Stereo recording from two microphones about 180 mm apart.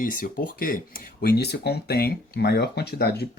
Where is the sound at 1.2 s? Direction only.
65° left (ahead or behind).